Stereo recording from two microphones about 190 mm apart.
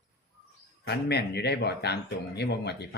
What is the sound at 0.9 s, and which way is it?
Speech, 60° left (ahead or behind).